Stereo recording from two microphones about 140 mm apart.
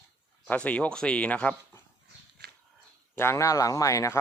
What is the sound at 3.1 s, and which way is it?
Speech, 20° left (ahead or behind).